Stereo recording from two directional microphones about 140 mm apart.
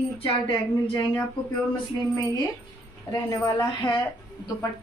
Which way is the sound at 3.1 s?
25° left (ahead or behind).